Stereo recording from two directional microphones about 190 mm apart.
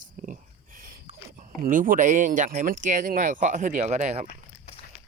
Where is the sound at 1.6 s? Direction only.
45° right (ahead or behind).